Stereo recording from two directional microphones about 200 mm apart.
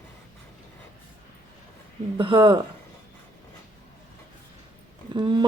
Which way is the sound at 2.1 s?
25° right (ahead or behind).